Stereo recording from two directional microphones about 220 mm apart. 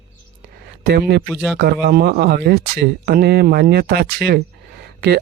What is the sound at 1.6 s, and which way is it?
Speech, 45° right (ahead or behind).